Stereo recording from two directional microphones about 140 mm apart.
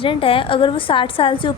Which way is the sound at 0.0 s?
40° left (ahead or behind).